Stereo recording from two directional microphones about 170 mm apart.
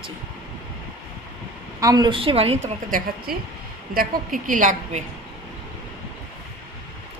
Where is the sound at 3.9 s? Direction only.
55° right (ahead or behind).